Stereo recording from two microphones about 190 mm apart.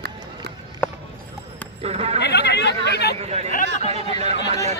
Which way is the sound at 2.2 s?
60° left (ahead or behind).